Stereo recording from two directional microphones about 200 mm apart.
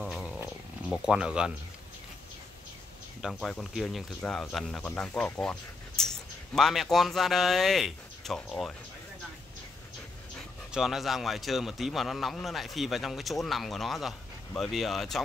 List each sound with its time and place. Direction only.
0.0 s a sound: centre (ahead or behind)
0.4 s wild animals: 5° right (ahead or behind)
3.2 s speech: centre (ahead or behind)
10.7 s speech: centre (ahead or behind)